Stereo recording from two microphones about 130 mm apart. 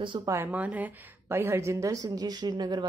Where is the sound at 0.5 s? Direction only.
10° right (ahead or behind); by 2.8 s 35° right (ahead or behind).